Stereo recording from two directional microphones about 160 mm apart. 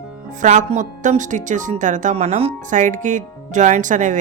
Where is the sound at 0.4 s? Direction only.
50° right (ahead or behind).